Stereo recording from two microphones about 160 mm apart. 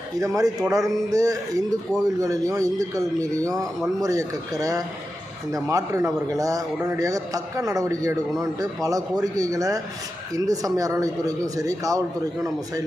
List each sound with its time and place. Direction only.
0.2 s a man's voice: 20° right (ahead or behind)